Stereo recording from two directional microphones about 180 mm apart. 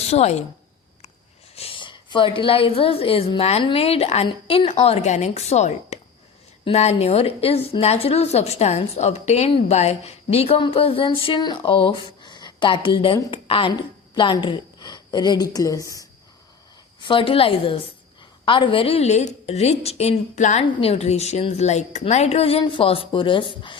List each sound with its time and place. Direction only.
0.1 s a woman's voice: 35° left (ahead or behind)
1.5 s a woman's voice: 30° left (ahead or behind)